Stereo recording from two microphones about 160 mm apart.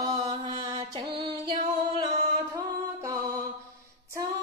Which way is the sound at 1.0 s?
40° right (ahead or behind).